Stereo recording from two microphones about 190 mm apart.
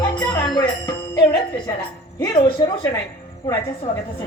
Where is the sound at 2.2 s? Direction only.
25° left (ahead or behind).